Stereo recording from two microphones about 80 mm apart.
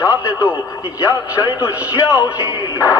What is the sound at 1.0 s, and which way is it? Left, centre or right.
Speech, left.